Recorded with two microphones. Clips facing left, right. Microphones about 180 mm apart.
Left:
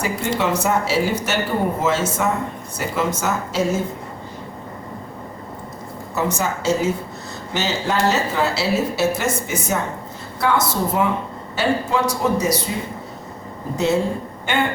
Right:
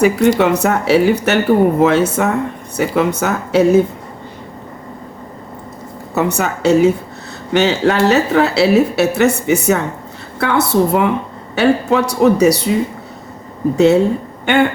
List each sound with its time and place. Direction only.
0.3 s speech: 65° right (ahead or behind)
6.1 s a woman's voice: 65° right (ahead or behind)
13.7 s a woman's voice: 65° right (ahead or behind)